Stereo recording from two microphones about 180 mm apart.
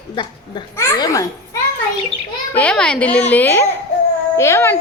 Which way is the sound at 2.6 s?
5° left (ahead or behind).